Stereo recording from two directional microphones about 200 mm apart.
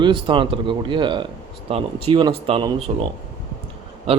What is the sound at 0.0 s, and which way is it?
Speech, 25° right (ahead or behind).